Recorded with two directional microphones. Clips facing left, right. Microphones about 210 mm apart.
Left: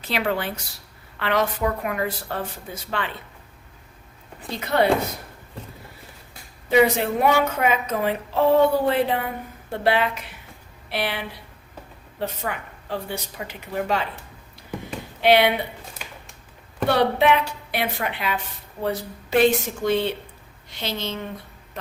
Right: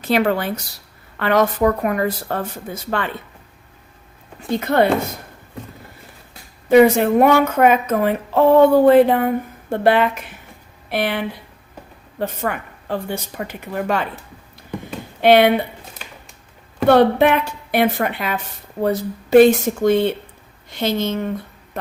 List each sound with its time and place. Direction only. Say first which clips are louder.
0.1 s a woman's voice: right 7 dB; 45° right (ahead or behind)
4.6 s a woman's voice: right 4 dB; 50° right (ahead or behind)
6.7 s a woman's voice: right 7 dB; 50° right (ahead or behind)
15.2 s a woman's voice: right 5 dB; 50° right (ahead or behind)
16.9 s a woman's voice: right 6 dB; 50° right (ahead or behind)